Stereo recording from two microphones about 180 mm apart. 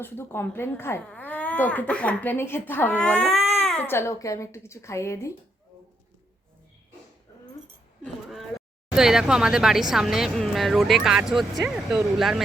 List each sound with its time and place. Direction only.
0.0 s speech: 10° left (ahead or behind)
8.0 s speech: centre (ahead or behind)